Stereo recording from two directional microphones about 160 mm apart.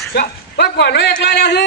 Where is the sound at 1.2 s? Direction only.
90° left.